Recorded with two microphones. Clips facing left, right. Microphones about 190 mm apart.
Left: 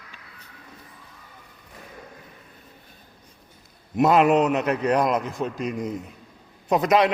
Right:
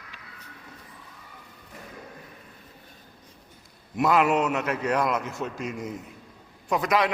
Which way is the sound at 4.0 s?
20° left (ahead or behind).